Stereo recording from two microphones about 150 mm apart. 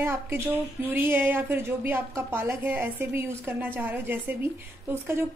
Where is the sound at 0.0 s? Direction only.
15° right (ahead or behind).